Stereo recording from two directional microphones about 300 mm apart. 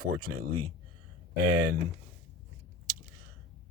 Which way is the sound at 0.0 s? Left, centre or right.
Right.